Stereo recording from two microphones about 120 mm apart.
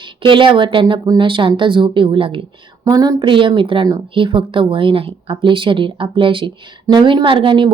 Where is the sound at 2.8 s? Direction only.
35° right (ahead or behind).